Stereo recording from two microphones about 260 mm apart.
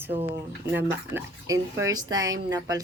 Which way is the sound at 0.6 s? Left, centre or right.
Centre.